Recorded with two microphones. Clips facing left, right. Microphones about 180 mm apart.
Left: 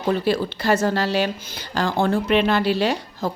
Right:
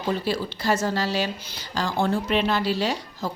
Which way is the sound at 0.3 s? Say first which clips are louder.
Left 4 dB; 60° left (ahead or behind).